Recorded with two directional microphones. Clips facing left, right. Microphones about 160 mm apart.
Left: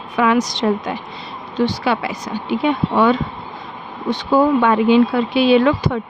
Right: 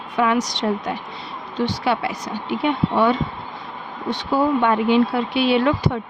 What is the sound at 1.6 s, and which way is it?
Speech, 90° left.